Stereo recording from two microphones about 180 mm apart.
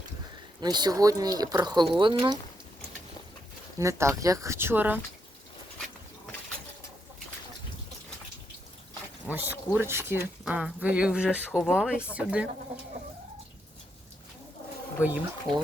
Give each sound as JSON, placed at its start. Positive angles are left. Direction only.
{"t": 0.6, "sound": "speech", "side_deg": -25}
{"t": 3.8, "sound": "speech", "side_deg": -15}
{"t": 9.2, "sound": "speech", "side_deg": -10}
{"t": 15.0, "sound": "speech", "side_deg": -10}